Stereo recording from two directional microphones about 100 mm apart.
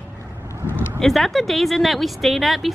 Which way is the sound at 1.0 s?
5° left (ahead or behind).